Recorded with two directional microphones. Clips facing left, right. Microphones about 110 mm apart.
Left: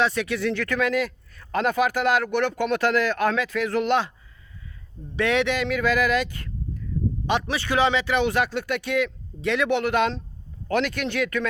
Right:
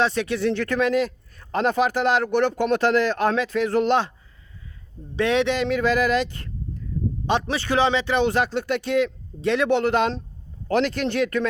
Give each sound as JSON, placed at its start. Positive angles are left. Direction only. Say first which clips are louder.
{"t": 0.0, "sound": "speech", "louder": "right 2 dB", "side_deg": -30}
{"t": 5.1, "sound": "speech", "louder": "right 2 dB", "side_deg": -25}